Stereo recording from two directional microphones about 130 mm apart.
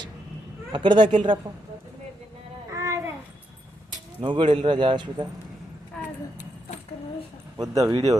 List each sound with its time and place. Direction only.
0.7 s a man's voice: 35° right (ahead or behind)
2.7 s a sound: 25° right (ahead or behind)
4.2 s a man's voice: 40° right (ahead or behind)
7.6 s speech: 25° right (ahead or behind)